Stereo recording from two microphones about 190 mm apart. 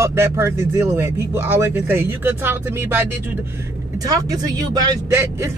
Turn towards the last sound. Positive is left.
turn(degrees=-15)  # may be behind; listen again after turning